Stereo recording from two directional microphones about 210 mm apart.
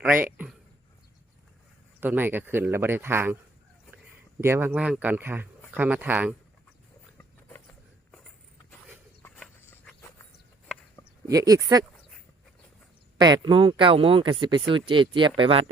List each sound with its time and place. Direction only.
0.0 s speech: 10° right (ahead or behind)
2.0 s speech: 10° right (ahead or behind)
9.2 s horse: 5° left (ahead or behind)
11.3 s speech: 15° right (ahead or behind)
13.1 s speech: 20° right (ahead or behind)